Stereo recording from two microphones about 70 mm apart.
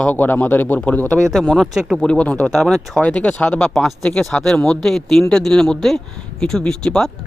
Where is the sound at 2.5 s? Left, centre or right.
Centre.